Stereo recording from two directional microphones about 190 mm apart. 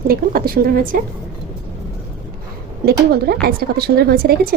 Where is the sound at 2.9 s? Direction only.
55° right (ahead or behind).